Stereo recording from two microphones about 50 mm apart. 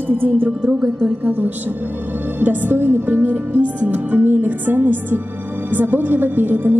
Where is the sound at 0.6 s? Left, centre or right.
Right.